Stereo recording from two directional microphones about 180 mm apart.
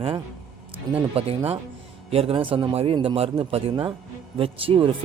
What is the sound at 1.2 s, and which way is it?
A man's voice, 30° right (ahead or behind).